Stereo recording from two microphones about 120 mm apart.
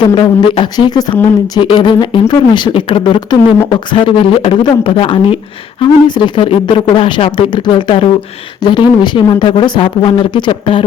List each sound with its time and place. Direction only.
0.0 s speech: 40° left (ahead or behind)
3.7 s speech: 45° left (ahead or behind)